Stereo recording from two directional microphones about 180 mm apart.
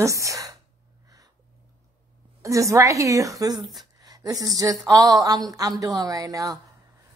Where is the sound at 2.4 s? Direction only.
15° right (ahead or behind).